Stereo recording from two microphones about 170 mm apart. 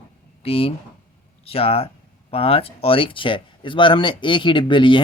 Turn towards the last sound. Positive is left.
turn(degrees=30)  # may be behind; listen again after turning